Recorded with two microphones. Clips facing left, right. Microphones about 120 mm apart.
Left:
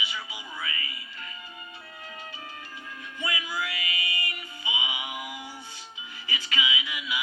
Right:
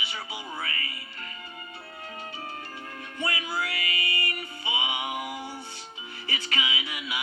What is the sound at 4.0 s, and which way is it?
Music, 35° right (ahead or behind).